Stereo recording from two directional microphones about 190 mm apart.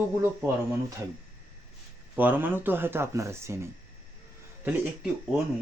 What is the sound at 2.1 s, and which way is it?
Speech, 10° right (ahead or behind).